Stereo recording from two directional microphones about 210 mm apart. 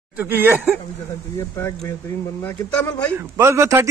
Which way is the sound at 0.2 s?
10° right (ahead or behind).